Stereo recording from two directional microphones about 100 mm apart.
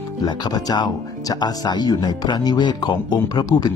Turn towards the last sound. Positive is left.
turn(degrees=45)  # may be behind; listen again after turning